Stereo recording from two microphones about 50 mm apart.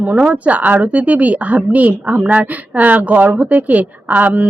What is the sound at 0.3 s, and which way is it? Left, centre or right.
Speech, right.